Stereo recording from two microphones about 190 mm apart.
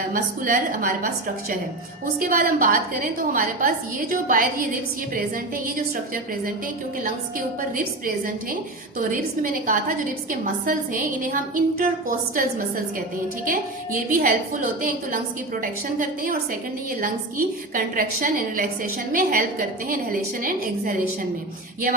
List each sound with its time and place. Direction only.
0.1 s a woman's voice: 45° right (ahead or behind)
9.0 s a woman's voice: 45° right (ahead or behind)